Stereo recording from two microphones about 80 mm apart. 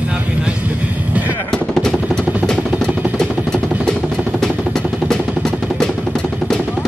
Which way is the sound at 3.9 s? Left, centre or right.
Centre.